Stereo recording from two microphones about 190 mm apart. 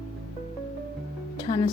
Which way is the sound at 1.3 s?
20° left (ahead or behind).